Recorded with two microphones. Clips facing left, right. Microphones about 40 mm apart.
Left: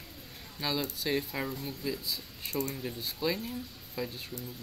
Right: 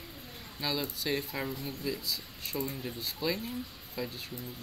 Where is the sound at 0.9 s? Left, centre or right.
Centre.